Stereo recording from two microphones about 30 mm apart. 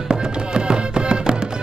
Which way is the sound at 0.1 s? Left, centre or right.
Right.